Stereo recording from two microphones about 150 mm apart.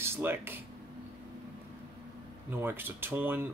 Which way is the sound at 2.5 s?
15° right (ahead or behind).